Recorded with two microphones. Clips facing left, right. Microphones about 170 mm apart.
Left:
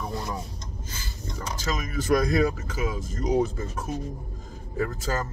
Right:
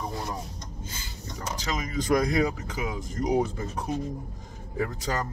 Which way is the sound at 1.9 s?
20° right (ahead or behind).